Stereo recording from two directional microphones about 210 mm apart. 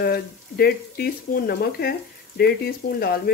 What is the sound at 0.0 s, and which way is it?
Speech, 45° left (ahead or behind).